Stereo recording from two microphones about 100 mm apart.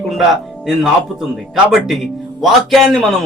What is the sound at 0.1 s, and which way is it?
Speech, centre (ahead or behind).